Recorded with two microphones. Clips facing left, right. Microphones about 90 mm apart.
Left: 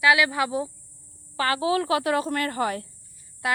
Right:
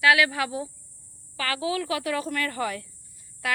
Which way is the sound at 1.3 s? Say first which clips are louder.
Left 5 dB; 35° left (ahead or behind).